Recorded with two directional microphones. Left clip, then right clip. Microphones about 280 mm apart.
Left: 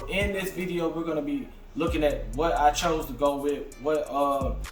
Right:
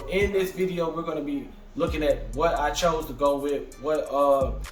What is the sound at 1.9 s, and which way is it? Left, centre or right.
Speech, centre.